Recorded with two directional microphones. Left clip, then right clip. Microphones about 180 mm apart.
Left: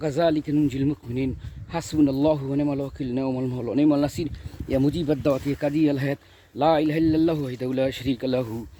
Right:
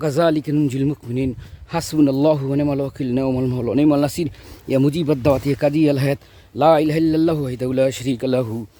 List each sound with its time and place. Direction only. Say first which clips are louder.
0.0 s speech: right 5 dB; 45° right (ahead or behind)
1.7 s speech: right 5 dB; 50° right (ahead or behind)